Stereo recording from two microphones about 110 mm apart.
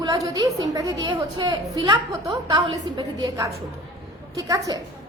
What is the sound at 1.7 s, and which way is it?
A woman's voice, 30° right (ahead or behind).